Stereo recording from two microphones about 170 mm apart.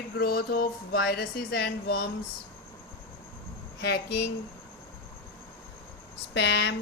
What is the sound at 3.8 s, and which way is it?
Speech, 80° left.